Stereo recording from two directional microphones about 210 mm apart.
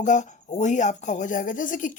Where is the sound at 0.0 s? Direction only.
35° left (ahead or behind).